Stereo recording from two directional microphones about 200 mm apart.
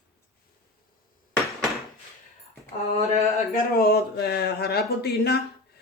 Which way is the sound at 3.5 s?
50° left (ahead or behind).